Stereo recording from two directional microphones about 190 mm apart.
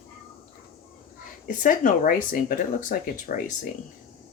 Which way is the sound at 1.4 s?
45° left (ahead or behind).